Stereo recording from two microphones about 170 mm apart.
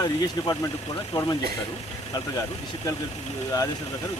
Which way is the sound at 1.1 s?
20° left (ahead or behind).